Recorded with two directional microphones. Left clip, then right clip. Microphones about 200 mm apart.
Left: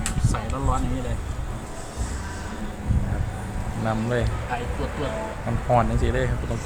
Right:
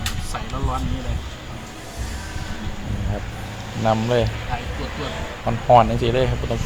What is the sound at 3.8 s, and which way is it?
Speech, 10° right (ahead or behind).